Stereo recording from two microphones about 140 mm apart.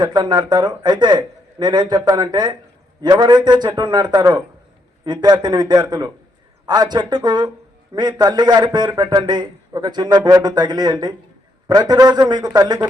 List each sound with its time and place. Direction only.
0.0 s a man's voice: 30° right (ahead or behind)